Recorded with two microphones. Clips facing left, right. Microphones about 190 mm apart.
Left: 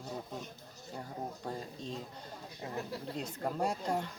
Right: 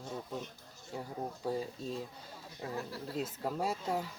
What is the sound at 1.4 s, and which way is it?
Speech, 5° right (ahead or behind).